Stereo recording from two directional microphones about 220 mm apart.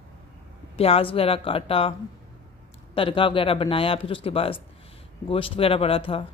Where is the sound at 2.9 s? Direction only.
25° left (ahead or behind).